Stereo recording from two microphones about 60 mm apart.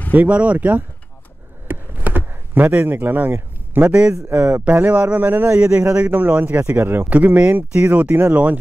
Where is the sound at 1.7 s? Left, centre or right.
Right.